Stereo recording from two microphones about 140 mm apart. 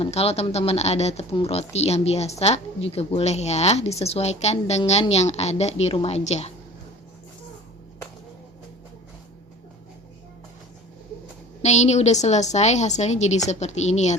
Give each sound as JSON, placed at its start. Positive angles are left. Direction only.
{"t": 0.0, "sound": "a woman's voice", "side_deg": 45}
{"t": 11.6, "sound": "a woman's voice", "side_deg": 55}